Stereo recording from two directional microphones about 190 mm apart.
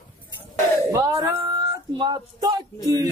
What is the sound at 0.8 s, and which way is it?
Speech, 15° right (ahead or behind).